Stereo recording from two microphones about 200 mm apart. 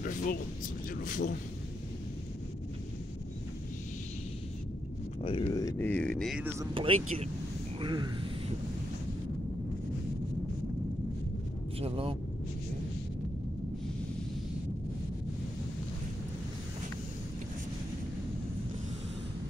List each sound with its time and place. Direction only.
0.0 s speech: 45° left (ahead or behind)
5.2 s speech: 25° left (ahead or behind); by 6.5 s centre (ahead or behind)
6.6 s speech: 25° right (ahead or behind)
11.8 s speech: 25° right (ahead or behind)